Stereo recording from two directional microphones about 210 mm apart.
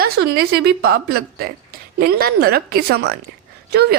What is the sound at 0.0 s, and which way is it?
A woman's voice, 50° right (ahead or behind).